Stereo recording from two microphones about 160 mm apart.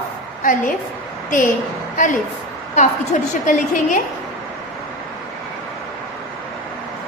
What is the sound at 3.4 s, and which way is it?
Speech, 55° left (ahead or behind).